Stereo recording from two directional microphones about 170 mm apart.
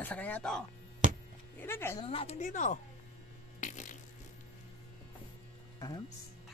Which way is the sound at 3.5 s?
45° left (ahead or behind).